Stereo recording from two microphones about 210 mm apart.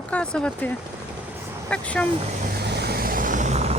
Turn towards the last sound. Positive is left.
turn(degrees=-30)  # may be behind; listen again after turning